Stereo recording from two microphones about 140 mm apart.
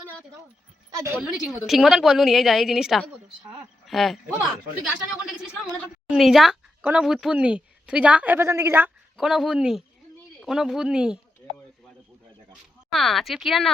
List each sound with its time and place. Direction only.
0.9 s a woman's voice: 20° right (ahead or behind)
1.2 s a woman's voice: centre (ahead or behind)
6.1 s speech: centre (ahead or behind); by 8.9 s 15° right (ahead or behind)
9.1 s a woman's voice: centre (ahead or behind)
12.9 s a woman's voice: centre (ahead or behind)